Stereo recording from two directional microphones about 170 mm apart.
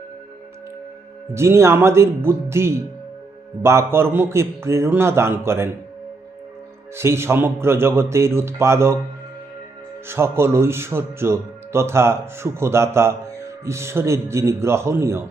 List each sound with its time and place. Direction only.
1.3 s speech: 15° right (ahead or behind)
6.9 s speech: 15° right (ahead or behind)
10.1 s speech: 15° right (ahead or behind)